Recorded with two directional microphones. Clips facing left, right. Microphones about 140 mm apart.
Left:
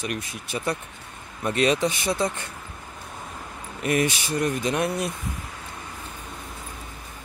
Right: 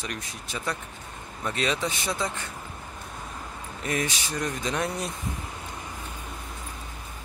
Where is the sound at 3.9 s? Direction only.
60° left (ahead or behind).